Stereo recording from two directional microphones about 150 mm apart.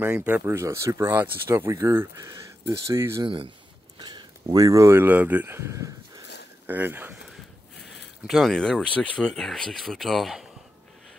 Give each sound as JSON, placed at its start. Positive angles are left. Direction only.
{"t": 0.0, "sound": "speech", "side_deg": -10}
{"t": 3.3, "sound": "speech", "side_deg": -35}
{"t": 8.3, "sound": "speech", "side_deg": 0}